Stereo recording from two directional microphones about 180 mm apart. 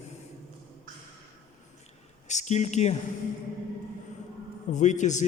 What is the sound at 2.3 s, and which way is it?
Speech, 40° left (ahead or behind).